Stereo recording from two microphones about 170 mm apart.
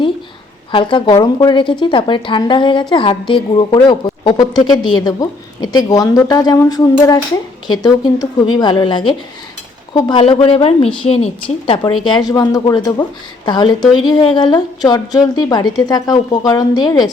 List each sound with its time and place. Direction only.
0.7 s a woman's voice: 30° left (ahead or behind)
13.8 s speech: centre (ahead or behind)
14.1 s a woman's voice: 30° left (ahead or behind)